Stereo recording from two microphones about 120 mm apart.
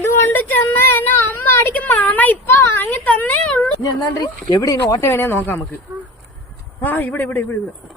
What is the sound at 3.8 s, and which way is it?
Speech, 35° left (ahead or behind).